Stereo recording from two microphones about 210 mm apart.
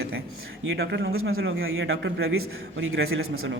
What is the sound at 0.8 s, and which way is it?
Speech, 50° right (ahead or behind).